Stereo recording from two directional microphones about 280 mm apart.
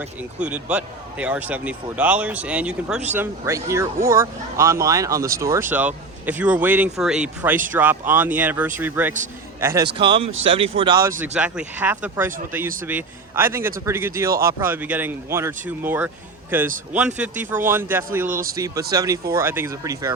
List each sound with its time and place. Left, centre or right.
0.3 s speech: centre
18.3 s speech: right
18.5 s speech: centre